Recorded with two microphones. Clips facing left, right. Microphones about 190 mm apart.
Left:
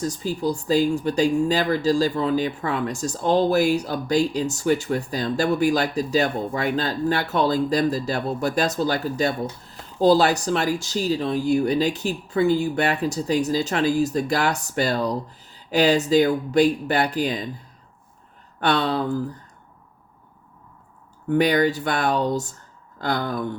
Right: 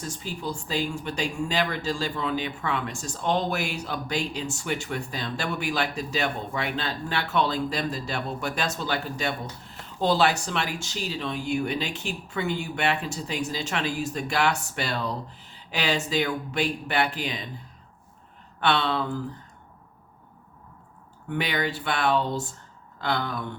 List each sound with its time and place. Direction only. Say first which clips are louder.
0.0 s speech: left 9 dB; 40° left (ahead or behind)
18.6 s speech: left 3 dB; 40° left (ahead or behind)
21.2 s speech: left 9 dB; 40° left (ahead or behind)